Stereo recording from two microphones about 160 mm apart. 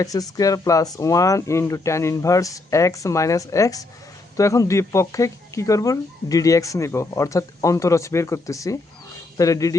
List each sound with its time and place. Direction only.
0.0 s speech: 20° left (ahead or behind)